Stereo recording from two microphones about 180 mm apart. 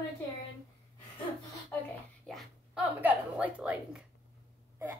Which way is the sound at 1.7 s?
10° left (ahead or behind).